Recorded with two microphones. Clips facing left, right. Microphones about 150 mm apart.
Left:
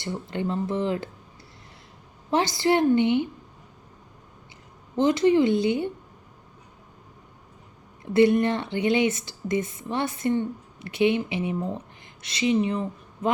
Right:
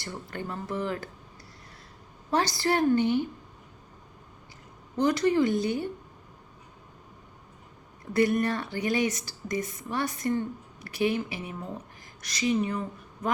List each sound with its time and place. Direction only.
0.0 s speech: 20° left (ahead or behind)
2.3 s speech: 20° left (ahead or behind)
4.9 s speech: 20° left (ahead or behind)
8.1 s a woman's voice: 25° left (ahead or behind)